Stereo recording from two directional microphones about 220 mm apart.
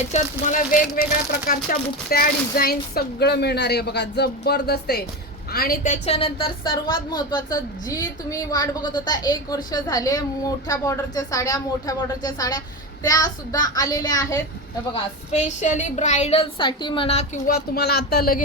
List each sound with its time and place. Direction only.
0.1 s a woman's voice: 35° left (ahead or behind); by 14.4 s 15° left (ahead or behind)
14.9 s a woman's voice: 30° left (ahead or behind)